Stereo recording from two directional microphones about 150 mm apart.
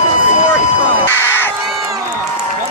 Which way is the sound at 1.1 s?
15° left (ahead or behind).